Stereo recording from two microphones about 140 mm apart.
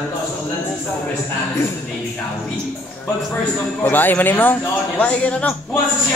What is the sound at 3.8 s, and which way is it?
A man's voice, 15° left (ahead or behind).